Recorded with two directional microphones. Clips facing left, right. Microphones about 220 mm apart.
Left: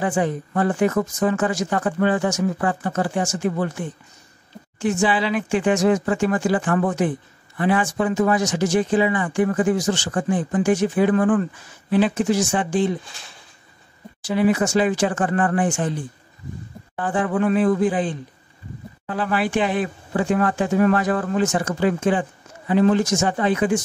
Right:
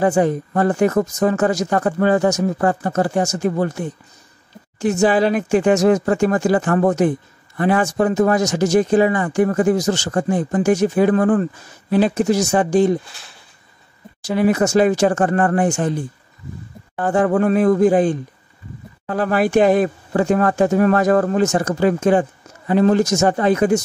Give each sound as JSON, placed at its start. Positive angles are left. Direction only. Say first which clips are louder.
{"t": 0.0, "sound": "speech", "louder": "right 6 dB", "side_deg": -40}
{"t": 14.2, "sound": "speech", "louder": "right 2 dB", "side_deg": -40}
{"t": 17.0, "sound": "speech", "louder": "right 5 dB", "side_deg": -45}